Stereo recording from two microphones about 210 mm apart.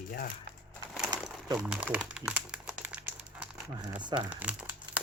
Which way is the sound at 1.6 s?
5° right (ahead or behind).